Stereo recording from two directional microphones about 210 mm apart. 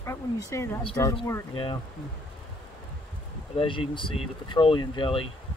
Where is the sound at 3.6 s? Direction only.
25° left (ahead or behind).